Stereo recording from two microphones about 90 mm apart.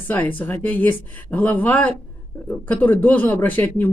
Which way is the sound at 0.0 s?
20° left (ahead or behind).